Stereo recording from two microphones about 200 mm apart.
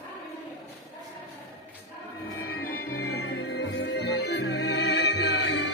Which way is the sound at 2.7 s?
50° left (ahead or behind).